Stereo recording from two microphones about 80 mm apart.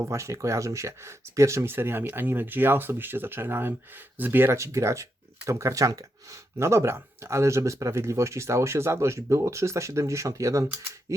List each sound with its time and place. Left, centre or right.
0.0 s speech: right